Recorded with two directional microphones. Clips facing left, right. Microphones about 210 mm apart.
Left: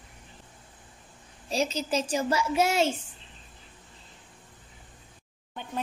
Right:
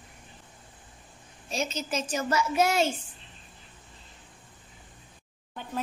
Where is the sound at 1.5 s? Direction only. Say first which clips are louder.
Left 4 dB; 35° left (ahead or behind).